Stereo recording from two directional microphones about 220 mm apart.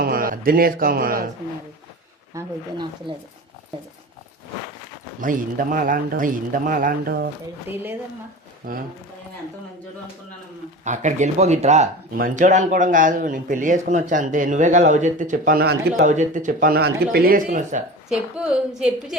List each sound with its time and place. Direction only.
0.0 s speech: 40° right (ahead or behind)
2.3 s speech: 20° right (ahead or behind)
5.2 s speech: 35° right (ahead or behind)
7.7 s speech: 10° right (ahead or behind)
10.8 s speech: 35° right (ahead or behind)
18.1 s a woman's voice: 5° right (ahead or behind)